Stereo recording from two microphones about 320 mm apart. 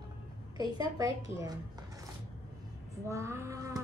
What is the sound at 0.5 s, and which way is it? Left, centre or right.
Speech, centre.